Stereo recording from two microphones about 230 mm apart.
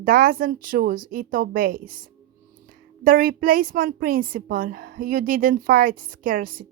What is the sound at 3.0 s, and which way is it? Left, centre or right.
A woman's voice, right.